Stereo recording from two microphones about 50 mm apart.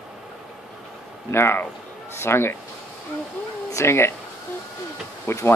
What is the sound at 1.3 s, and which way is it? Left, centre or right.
Speech, left.